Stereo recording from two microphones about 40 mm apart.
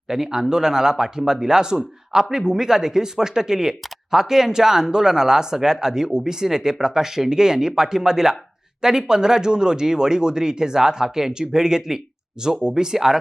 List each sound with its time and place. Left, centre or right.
0.1 s speech: centre